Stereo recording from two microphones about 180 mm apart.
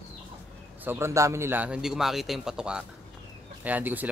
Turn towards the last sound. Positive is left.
turn(degrees=-10)  # may be behind; listen again after turning